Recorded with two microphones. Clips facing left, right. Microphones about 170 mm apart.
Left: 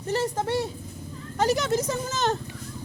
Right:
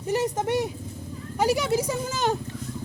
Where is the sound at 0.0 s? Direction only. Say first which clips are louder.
Right 1 dB; 15° right (ahead or behind).